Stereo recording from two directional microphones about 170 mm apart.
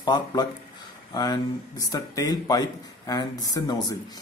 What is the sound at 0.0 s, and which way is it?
Speech, 25° left (ahead or behind).